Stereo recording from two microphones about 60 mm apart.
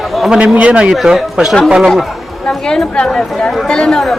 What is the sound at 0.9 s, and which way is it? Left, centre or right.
Speech, centre.